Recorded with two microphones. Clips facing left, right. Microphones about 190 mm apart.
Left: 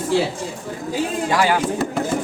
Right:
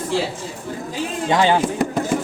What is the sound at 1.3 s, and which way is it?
Speech, 25° right (ahead or behind).